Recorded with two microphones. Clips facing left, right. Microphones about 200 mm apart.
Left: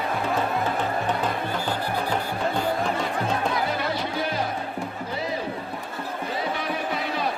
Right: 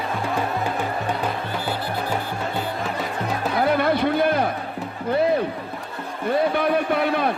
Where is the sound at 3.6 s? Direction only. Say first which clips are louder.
Right 8 dB; 55° right (ahead or behind).